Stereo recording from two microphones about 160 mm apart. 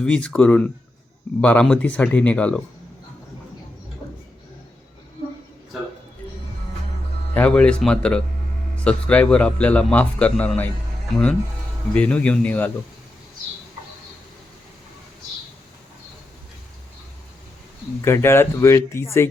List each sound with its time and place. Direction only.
0.0 s a man's voice: 5° left (ahead or behind)
7.3 s a man's voice: 10° left (ahead or behind)
11.9 s a man's voice: 10° left (ahead or behind)
18.0 s a man's voice: 15° left (ahead or behind)